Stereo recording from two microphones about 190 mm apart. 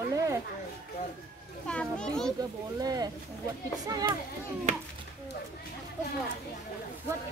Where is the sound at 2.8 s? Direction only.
20° right (ahead or behind).